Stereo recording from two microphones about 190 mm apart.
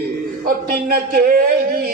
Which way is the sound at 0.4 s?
50° right (ahead or behind).